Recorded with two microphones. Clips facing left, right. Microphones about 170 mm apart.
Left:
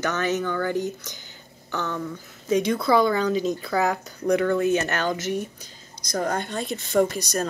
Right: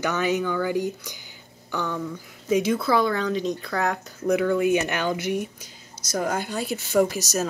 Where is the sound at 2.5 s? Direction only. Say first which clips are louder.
Left 1 dB; 5° right (ahead or behind).